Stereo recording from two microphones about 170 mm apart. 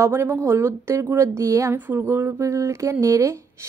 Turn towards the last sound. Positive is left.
turn(degrees=-15)  # may be behind; listen again after turning